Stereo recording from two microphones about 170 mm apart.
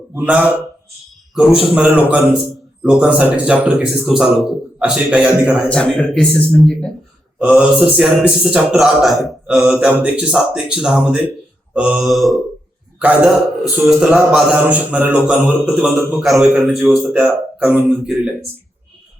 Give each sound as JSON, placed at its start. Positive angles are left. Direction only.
{"t": 0.1, "sound": "a man's voice", "side_deg": -5}
{"t": 1.6, "sound": "a man's voice", "side_deg": -5}